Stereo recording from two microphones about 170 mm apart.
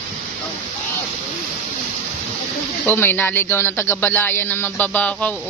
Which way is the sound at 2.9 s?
10° left (ahead or behind).